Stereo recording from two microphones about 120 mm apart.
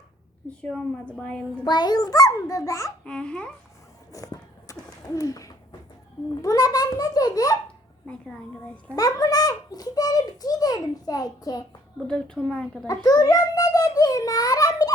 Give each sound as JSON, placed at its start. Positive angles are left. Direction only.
{"t": 0.6, "sound": "a child's voice", "side_deg": 10}
{"t": 1.6, "sound": "a child's voice", "side_deg": 35}
{"t": 3.0, "sound": "a child's voice", "side_deg": 10}
{"t": 4.1, "sound": "a sound", "side_deg": 30}
{"t": 6.4, "sound": "a child's voice", "side_deg": 30}
{"t": 8.0, "sound": "a child's voice", "side_deg": 10}
{"t": 9.0, "sound": "a child's voice", "side_deg": 30}
{"t": 12.0, "sound": "a child's voice", "side_deg": 5}
{"t": 13.1, "sound": "a sound", "side_deg": 30}